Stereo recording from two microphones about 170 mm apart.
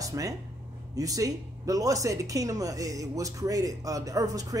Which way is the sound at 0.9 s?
20° right (ahead or behind).